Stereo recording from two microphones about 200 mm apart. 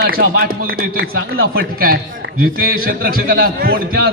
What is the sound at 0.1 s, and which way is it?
A man's voice, 50° right (ahead or behind).